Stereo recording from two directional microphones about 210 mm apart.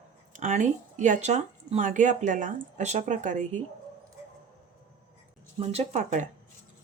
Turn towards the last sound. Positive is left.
turn(degrees=-35)  # may be behind; listen again after turning